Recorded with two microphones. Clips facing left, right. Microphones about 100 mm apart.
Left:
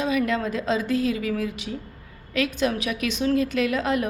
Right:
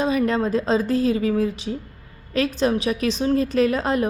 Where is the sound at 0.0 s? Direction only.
35° right (ahead or behind).